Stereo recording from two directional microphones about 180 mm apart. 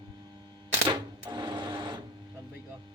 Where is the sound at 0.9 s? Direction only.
25° right (ahead or behind).